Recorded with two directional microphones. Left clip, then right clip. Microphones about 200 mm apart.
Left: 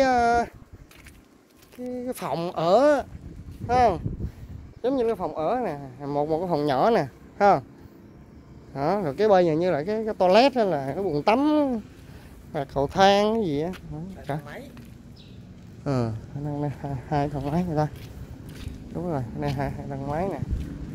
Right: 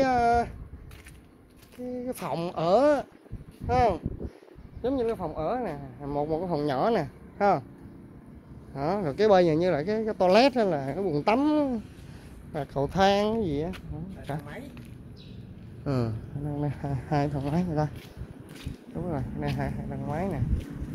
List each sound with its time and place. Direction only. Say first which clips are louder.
0.0 s a sound: left 3 dB; 25° left (ahead or behind)
2.0 s speech: left 3 dB; 25° left (ahead or behind)
4.8 s speech: left 4 dB; 35° left (ahead or behind)
8.7 s speech: left 4 dB; 20° left (ahead or behind)
9.1 s speech: left 1 dB; 10° left (ahead or behind)
15.8 s speech: left 3 dB; 25° left (ahead or behind)
16.6 s speech: left 2 dB; 5° left (ahead or behind)
18.9 s speech: left 4 dB; 30° left (ahead or behind)